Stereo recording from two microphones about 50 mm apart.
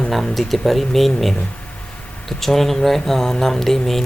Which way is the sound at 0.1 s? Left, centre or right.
Centre.